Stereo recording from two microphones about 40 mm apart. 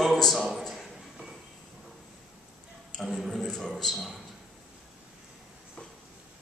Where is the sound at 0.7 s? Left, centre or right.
Centre.